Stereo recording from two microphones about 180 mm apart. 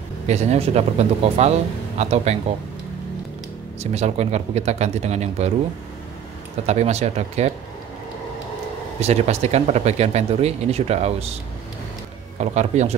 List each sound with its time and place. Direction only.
0.3 s speech: 40° right (ahead or behind)
3.8 s speech: 35° right (ahead or behind)
6.6 s speech: 35° right (ahead or behind)
9.0 s speech: 35° right (ahead or behind)
12.4 s speech: 40° right (ahead or behind)